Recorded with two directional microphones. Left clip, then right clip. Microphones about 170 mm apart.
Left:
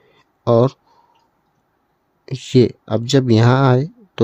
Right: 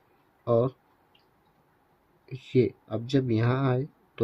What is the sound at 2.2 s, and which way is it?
Speech, 90° left.